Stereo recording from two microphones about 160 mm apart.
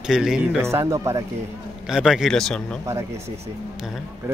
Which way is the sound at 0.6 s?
20° right (ahead or behind).